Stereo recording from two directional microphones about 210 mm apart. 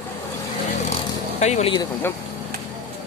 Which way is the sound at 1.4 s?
30° left (ahead or behind).